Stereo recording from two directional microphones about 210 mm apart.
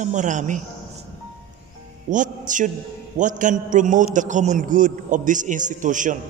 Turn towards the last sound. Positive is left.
turn(degrees=-40)  # may be behind; listen again after turning